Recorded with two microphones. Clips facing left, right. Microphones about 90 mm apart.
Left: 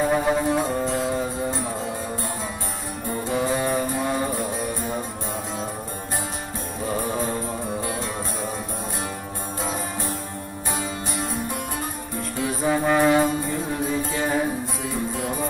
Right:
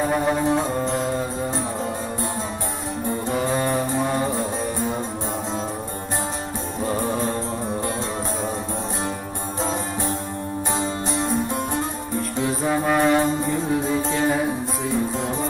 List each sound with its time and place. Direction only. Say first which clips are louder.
0.0 s music: even; centre (ahead or behind)
0.4 s music: right 2 dB; 20° right (ahead or behind)
3.2 s music: even; 10° left (ahead or behind)
7.0 s mantra: right 2 dB; 5° left (ahead or behind)
10.7 s music: right 3 dB; 25° right (ahead or behind)
12.6 s music: left 1 dB; centre (ahead or behind)